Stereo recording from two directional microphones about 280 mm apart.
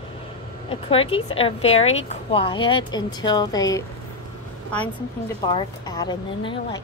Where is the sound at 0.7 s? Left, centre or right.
Centre.